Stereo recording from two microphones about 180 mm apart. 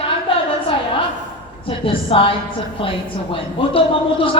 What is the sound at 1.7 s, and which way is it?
A woman's voice, 30° left (ahead or behind).